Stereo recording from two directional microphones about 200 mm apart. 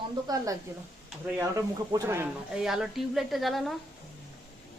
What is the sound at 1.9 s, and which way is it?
A woman's voice, 15° right (ahead or behind).